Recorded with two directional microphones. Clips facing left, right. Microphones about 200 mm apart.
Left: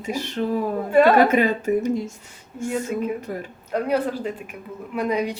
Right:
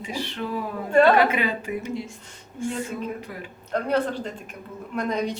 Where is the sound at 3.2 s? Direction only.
45° left (ahead or behind).